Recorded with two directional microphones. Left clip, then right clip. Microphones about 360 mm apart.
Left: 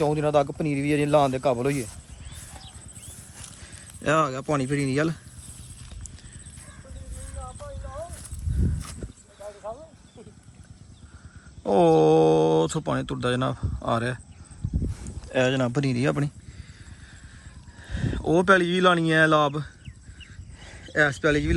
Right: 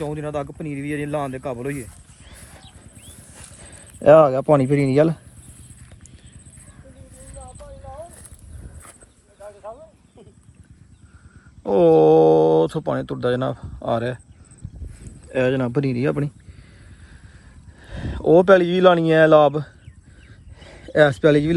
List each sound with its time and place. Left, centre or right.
0.0 s a man's voice: centre
2.3 s clip-clop: centre
3.6 s speech: centre
11.6 s speech: centre
15.3 s speech: centre
17.7 s speech: centre
20.6 s a sound: centre